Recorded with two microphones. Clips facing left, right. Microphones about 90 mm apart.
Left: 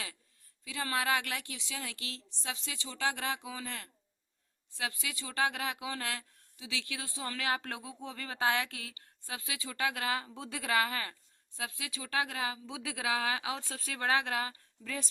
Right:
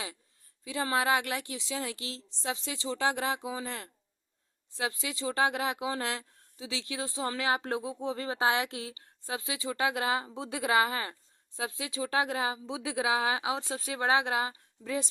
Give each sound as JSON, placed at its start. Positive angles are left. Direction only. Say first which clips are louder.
{"t": 0.6, "sound": "speech", "louder": "right 5 dB", "side_deg": -25}